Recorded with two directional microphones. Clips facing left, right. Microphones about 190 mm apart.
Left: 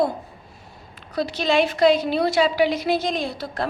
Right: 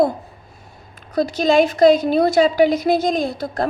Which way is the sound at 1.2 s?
45° right (ahead or behind).